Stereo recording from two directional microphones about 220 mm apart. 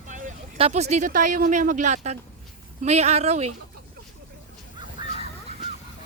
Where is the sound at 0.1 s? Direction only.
35° right (ahead or behind).